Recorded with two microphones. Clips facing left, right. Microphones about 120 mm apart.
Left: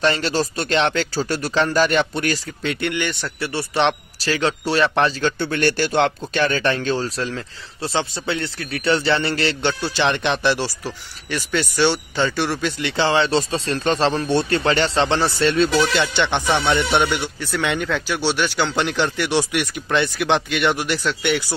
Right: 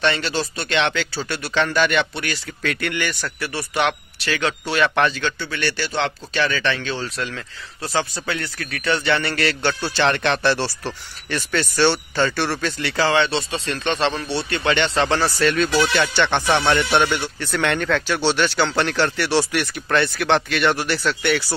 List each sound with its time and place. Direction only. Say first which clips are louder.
0.0 s speech: left 2 dB; 40° left (ahead or behind)
2.6 s speech: even; 25° left (ahead or behind)
5.4 s speech: left 6 dB; 50° left (ahead or behind)
14.2 s speech: left 6 dB; 45° left (ahead or behind)
14.6 s speech: left 1 dB; 35° left (ahead or behind)
16.0 s speech: right 1 dB; 15° left (ahead or behind)